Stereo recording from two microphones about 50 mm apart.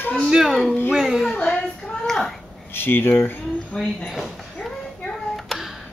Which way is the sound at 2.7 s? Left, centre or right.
Left.